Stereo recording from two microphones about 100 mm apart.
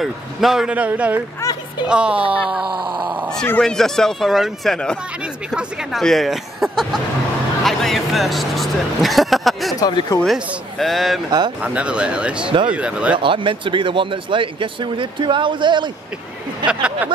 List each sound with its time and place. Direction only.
0.0 s speech: centre (ahead or behind)
0.7 s speech: 15° right (ahead or behind)
1.4 s a sound: 40° left (ahead or behind)
1.9 s speech: 10° right (ahead or behind)
2.9 s speech: 50° right (ahead or behind)
3.6 s speech: 5° left (ahead or behind)
9.8 s speech: 40° left (ahead or behind)
10.8 s speech: centre (ahead or behind)
11.2 s speech: 45° right (ahead or behind)
11.6 s speech: 10° right (ahead or behind)
13.2 s speech: 60° right (ahead or behind)
16.6 s speech: 10° right (ahead or behind)